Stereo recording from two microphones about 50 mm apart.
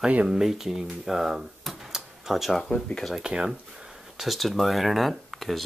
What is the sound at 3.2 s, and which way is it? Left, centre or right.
Speech, centre.